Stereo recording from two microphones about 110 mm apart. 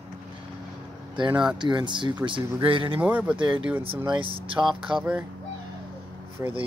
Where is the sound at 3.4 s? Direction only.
45° right (ahead or behind).